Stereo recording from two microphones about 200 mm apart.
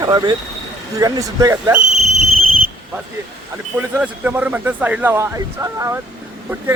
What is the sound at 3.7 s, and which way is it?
A man's voice, 5° right (ahead or behind).